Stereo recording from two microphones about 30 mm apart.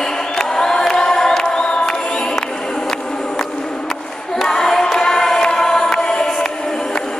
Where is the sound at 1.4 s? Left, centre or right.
Left.